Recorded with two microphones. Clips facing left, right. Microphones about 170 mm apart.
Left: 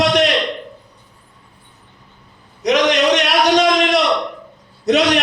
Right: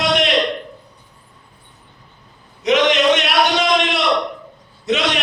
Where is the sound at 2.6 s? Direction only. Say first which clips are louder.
Even; 40° left (ahead or behind).